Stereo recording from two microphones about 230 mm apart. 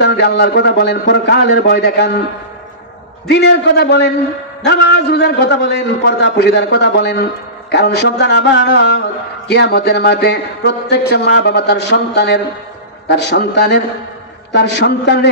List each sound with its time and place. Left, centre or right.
0.0 s speech: left
3.3 s speech: left